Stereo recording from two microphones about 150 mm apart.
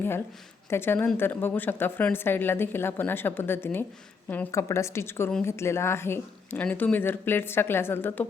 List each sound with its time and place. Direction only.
0.7 s a woman's voice: 15° left (ahead or behind)